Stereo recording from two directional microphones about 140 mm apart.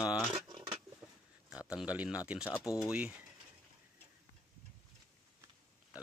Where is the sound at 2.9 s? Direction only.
10° right (ahead or behind).